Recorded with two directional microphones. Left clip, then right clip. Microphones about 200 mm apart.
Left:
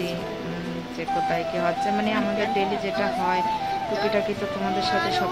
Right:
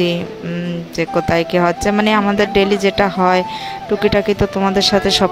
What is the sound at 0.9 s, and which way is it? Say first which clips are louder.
Speech: right 9 dB; 50° right (ahead or behind).